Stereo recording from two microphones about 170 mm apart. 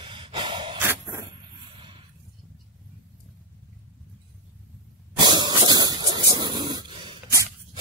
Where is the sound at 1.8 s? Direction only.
30° right (ahead or behind).